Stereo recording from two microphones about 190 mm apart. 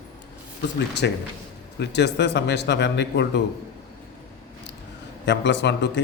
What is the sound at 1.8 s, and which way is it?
Speech, 65° left (ahead or behind).